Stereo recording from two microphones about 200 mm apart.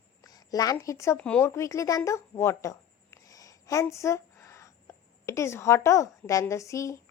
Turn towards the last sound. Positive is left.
turn(degrees=15)  # may be behind; listen again after turning